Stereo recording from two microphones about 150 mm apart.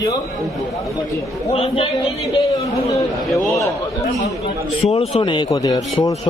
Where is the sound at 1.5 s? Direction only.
40° left (ahead or behind).